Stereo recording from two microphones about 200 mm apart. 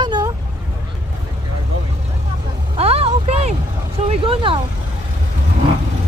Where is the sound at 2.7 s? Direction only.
30° right (ahead or behind).